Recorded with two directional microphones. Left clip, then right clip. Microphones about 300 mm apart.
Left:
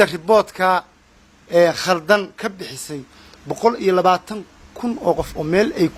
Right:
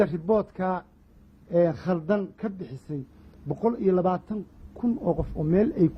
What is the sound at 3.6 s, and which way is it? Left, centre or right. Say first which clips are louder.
Speech: left 8 dB; centre.